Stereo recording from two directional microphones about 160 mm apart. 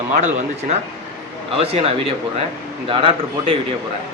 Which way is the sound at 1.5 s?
40° right (ahead or behind).